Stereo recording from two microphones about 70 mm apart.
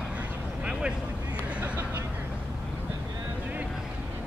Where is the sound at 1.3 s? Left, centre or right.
Right.